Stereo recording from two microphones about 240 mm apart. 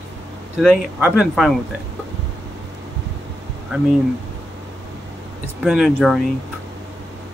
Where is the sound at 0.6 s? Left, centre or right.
Centre.